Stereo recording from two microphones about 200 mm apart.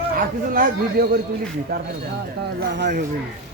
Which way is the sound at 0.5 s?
45° right (ahead or behind).